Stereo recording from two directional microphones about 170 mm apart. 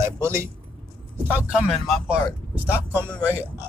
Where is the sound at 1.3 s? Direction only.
5° right (ahead or behind).